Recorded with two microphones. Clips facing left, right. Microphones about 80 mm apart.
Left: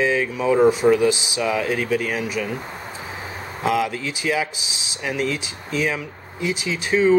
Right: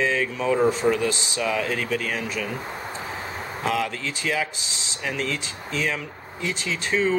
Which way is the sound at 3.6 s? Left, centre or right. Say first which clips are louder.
Left 4 dB; centre.